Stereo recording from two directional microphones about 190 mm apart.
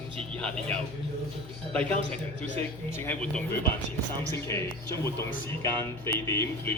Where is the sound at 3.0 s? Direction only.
5° left (ahead or behind).